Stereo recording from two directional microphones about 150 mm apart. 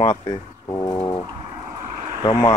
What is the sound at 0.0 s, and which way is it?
Speech, 35° left (ahead or behind).